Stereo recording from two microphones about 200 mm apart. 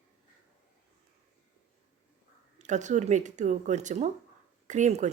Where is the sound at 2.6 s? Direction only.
35° right (ahead or behind).